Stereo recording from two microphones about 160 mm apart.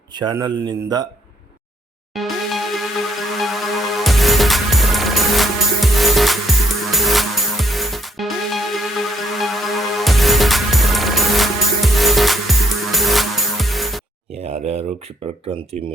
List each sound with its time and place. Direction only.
0.1 s a man's voice: 25° right (ahead or behind)
2.1 s music: centre (ahead or behind)
14.3 s a sound: 40° right (ahead or behind)
15.7 s speech: 45° right (ahead or behind)